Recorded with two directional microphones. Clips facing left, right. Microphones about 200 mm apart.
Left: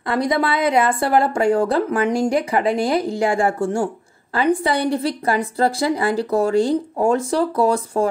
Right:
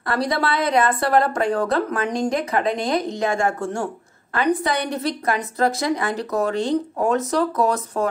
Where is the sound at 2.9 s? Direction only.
30° left (ahead or behind).